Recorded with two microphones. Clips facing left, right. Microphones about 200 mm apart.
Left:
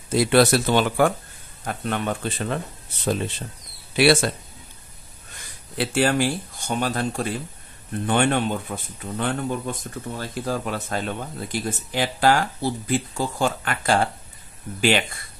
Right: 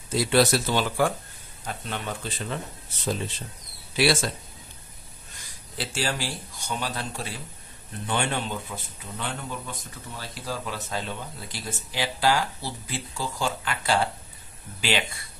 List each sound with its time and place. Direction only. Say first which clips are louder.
0.1 s speech: left 4 dB; 60° left (ahead or behind)
3.9 s speech: left 6 dB; 60° left (ahead or behind)
5.8 s speech: left 9 dB; 60° left (ahead or behind)